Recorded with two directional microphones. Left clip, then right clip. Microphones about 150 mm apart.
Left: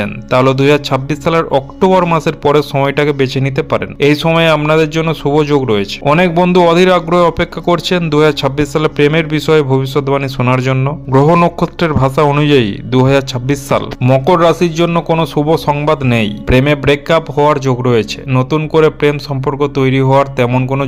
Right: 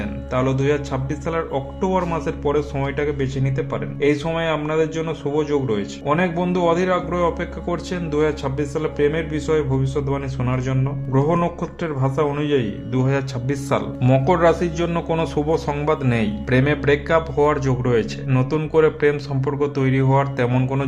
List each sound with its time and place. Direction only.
0.0 s speech: 45° left (ahead or behind); by 20.5 s 25° left (ahead or behind)